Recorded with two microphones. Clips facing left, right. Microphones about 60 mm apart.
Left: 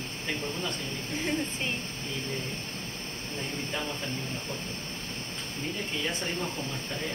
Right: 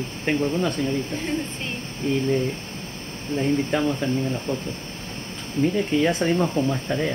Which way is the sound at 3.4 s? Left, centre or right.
Right.